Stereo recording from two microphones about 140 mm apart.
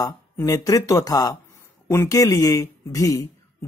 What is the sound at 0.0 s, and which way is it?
Speech, 25° left (ahead or behind).